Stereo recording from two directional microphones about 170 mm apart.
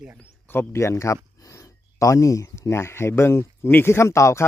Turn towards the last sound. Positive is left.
turn(degrees=15)  # may be behind; listen again after turning